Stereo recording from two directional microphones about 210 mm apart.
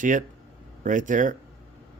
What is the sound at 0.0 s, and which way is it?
Speech, 40° right (ahead or behind).